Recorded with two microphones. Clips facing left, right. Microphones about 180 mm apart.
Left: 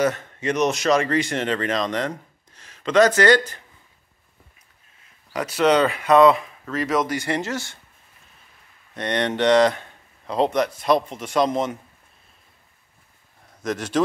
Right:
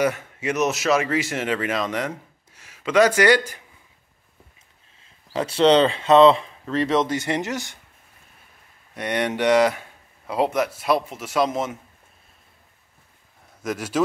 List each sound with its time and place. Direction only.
0.0 s speech: 10° right (ahead or behind)
5.3 s speech: 30° right (ahead or behind)
8.9 s speech: 10° right (ahead or behind)
13.6 s speech: 10° right (ahead or behind)